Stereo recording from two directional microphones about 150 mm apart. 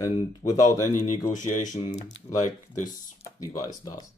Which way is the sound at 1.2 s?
55° left (ahead or behind).